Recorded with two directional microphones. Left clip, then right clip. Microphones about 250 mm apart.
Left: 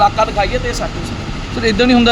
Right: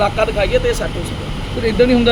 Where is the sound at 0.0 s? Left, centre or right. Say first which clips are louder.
Left 3 dB; centre.